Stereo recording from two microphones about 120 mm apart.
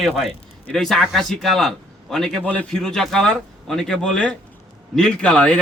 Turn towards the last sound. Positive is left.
turn(degrees=10)  # may be behind; listen again after turning